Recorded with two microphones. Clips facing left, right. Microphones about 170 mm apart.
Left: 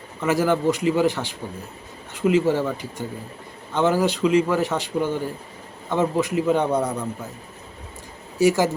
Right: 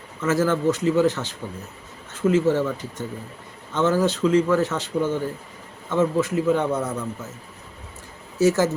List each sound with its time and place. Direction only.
0.2 s speech: 15° left (ahead or behind)
3.8 s speech: 15° left (ahead or behind)
6.7 s a man's voice: 35° left (ahead or behind)
8.4 s speech: 15° left (ahead or behind)